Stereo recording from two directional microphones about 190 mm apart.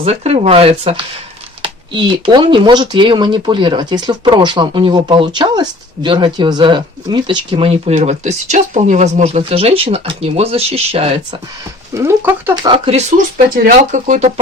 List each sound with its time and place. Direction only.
0.0 s speech: 35° right (ahead or behind)
11.9 s speech: 10° right (ahead or behind)
12.6 s speech: 30° right (ahead or behind)